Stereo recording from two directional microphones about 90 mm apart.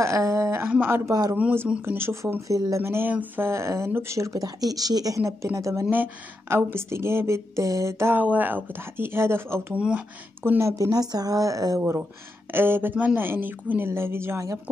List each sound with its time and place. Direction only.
0.0 s speech: 35° right (ahead or behind)
0.7 s speech: 20° right (ahead or behind)
2.4 s speech: 40° right (ahead or behind)
9.8 s speech: 15° right (ahead or behind)
10.4 s speech: 25° right (ahead or behind)
10.8 s speech: 45° right (ahead or behind)
12.5 s speech: 25° right (ahead or behind)